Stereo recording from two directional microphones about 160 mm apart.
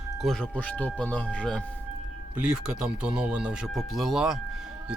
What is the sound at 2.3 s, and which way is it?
Speech, 5° right (ahead or behind).